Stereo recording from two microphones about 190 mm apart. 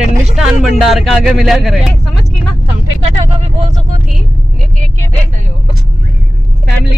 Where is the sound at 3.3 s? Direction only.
35° right (ahead or behind).